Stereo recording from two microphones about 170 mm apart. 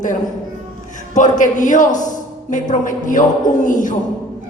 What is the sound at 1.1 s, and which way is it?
A man's voice, 45° left (ahead or behind).